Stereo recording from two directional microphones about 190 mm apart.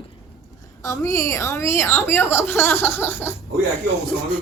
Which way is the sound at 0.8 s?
15° left (ahead or behind).